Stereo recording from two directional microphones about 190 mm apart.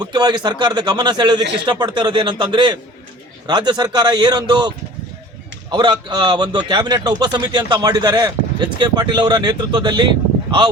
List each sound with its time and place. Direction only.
0.0 s speech: 20° right (ahead or behind)
5.7 s speech: 25° right (ahead or behind)